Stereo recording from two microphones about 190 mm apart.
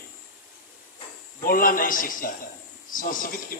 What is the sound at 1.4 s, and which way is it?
A man's voice, 50° left (ahead or behind).